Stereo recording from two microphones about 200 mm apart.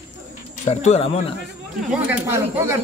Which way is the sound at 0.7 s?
30° left (ahead or behind).